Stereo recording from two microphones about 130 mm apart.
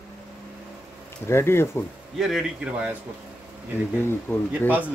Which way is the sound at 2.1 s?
5° right (ahead or behind).